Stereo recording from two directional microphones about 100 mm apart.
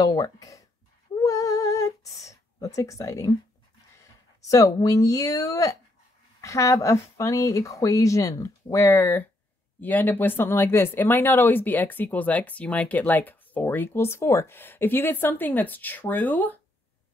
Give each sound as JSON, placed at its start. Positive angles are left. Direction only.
{"t": 0.0, "sound": "speech", "side_deg": 40}
{"t": 1.1, "sound": "female singing", "side_deg": 35}
{"t": 2.2, "sound": "speech", "side_deg": 35}